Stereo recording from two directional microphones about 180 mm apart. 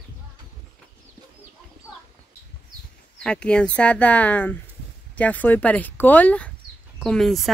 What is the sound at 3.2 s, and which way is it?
Speech, 5° left (ahead or behind).